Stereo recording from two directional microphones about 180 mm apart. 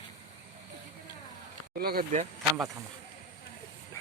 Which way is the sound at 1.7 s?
55° right (ahead or behind).